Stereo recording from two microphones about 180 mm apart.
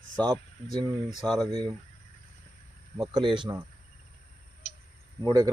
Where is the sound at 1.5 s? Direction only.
25° right (ahead or behind).